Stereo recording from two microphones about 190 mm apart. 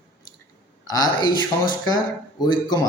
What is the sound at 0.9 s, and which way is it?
Speech, 20° left (ahead or behind).